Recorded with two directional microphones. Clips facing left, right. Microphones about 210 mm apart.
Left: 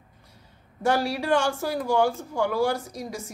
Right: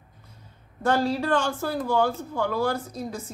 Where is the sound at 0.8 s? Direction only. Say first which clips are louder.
Even; 10° left (ahead or behind).